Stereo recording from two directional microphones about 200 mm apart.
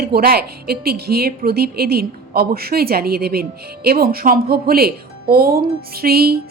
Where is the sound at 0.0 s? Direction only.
50° right (ahead or behind).